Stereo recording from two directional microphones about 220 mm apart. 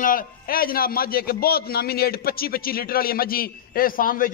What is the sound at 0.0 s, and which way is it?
A man's voice, 40° left (ahead or behind).